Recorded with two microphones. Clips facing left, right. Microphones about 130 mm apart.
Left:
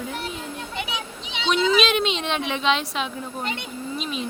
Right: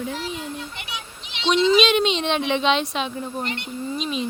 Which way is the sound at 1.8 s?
Centre (ahead or behind).